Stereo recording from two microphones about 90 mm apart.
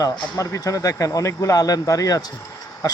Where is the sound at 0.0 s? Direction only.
40° left (ahead or behind).